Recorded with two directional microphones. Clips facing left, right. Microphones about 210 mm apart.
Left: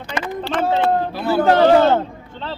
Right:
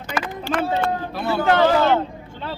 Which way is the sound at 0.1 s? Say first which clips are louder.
Left 1 dB; 5° right (ahead or behind).